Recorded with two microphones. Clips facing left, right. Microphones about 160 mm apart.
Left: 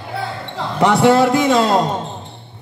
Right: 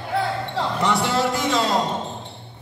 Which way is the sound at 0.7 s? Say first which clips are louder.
Left 11 dB; 65° left (ahead or behind).